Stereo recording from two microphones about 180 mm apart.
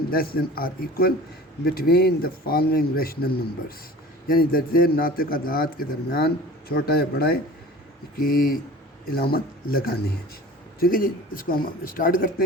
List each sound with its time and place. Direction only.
0.1 s a man's voice: 55° left (ahead or behind)